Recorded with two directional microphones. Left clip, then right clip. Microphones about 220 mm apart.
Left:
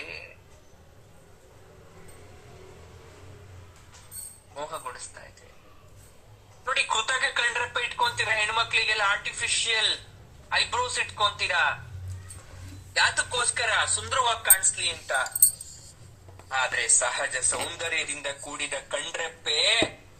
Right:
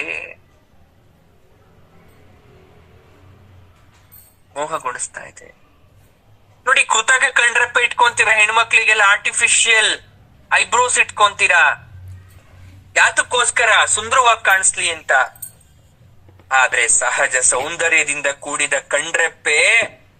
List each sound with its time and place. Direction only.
0.0 s a sound: 40° right (ahead or behind)
4.5 s a man's voice: 35° right (ahead or behind)
6.7 s a man's voice: 35° right (ahead or behind)
12.9 s a man's voice: 35° right (ahead or behind)
16.5 s a man's voice: 35° right (ahead or behind)